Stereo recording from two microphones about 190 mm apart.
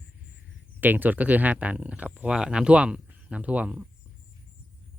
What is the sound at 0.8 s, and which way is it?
Speech, 10° right (ahead or behind).